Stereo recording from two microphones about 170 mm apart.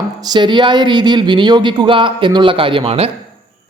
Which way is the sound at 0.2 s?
25° right (ahead or behind).